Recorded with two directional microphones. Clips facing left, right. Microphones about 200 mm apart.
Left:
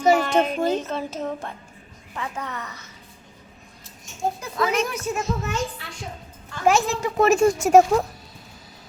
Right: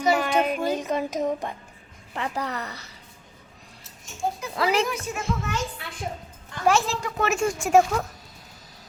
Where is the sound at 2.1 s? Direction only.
35° right (ahead or behind).